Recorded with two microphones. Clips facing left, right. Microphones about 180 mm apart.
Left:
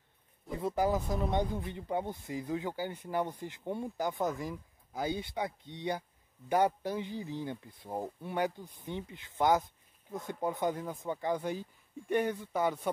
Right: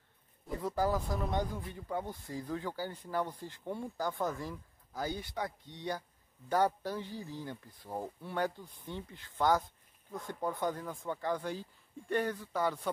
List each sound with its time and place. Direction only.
0.6 s speech: 20° left (ahead or behind)